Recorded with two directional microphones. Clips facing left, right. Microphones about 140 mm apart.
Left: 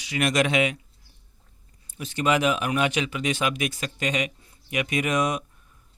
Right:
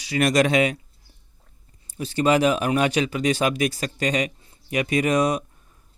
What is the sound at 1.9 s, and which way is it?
Speech, 35° right (ahead or behind).